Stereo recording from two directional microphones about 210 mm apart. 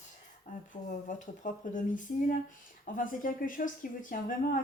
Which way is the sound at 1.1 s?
35° left (ahead or behind).